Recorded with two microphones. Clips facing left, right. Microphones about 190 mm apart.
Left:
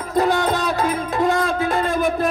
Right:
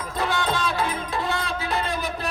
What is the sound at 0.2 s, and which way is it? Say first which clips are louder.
Music: left 7 dB; 45° left (ahead or behind).